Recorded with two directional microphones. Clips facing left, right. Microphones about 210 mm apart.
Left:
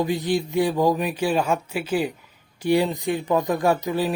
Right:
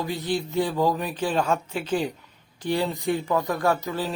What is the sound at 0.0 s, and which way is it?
Speech, 15° left (ahead or behind).